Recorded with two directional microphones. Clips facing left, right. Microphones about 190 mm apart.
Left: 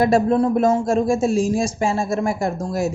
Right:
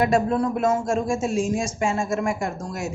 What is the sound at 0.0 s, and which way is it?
Speech, 35° left (ahead or behind).